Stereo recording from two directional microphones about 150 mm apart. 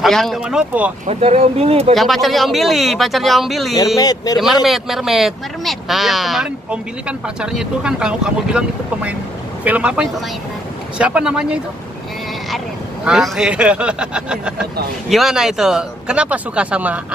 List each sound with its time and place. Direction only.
0.0 s speech: centre (ahead or behind)
1.0 s speech: 45° right (ahead or behind)
2.0 s speech: centre (ahead or behind)
3.7 s speech: 25° left (ahead or behind)
4.6 s speech: centre (ahead or behind)